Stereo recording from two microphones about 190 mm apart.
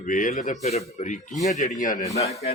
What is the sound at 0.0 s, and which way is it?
Speech, 45° left (ahead or behind).